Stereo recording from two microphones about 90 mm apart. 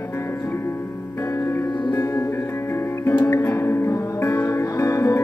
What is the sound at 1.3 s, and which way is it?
Music, 30° left (ahead or behind).